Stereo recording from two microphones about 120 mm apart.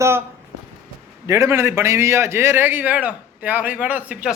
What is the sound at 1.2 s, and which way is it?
A man's voice, 25° right (ahead or behind).